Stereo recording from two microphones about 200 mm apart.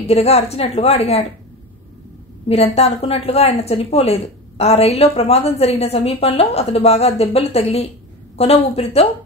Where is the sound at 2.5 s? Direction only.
30° left (ahead or behind).